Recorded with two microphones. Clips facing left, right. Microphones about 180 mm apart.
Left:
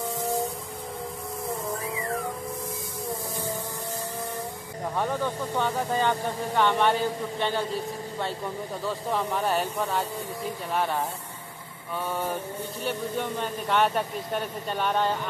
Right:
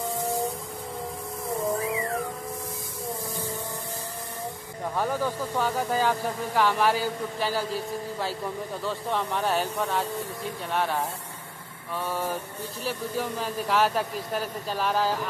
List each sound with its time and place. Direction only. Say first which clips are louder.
4.9 s speech: right 1 dB; centre (ahead or behind)
12.1 s speech: left 1 dB; centre (ahead or behind)